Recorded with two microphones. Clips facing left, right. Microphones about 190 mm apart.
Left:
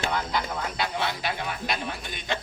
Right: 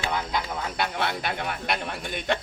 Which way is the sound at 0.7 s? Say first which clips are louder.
Right 3 dB; 60° right (ahead or behind).